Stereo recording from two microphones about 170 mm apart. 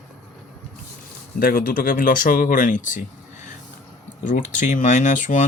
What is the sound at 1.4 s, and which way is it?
Speech, 55° left (ahead or behind).